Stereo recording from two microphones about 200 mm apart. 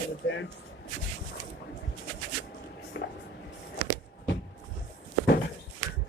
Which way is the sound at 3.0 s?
60° left (ahead or behind).